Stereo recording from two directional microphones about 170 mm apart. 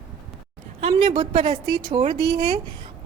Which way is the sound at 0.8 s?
35° right (ahead or behind).